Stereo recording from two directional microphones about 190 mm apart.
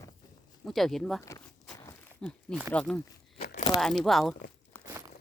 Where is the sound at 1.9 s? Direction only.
5° left (ahead or behind).